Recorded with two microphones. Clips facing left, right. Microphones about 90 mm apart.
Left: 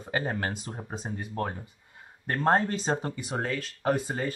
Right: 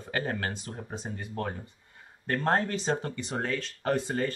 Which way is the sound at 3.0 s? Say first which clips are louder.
Left 1 dB; 10° left (ahead or behind).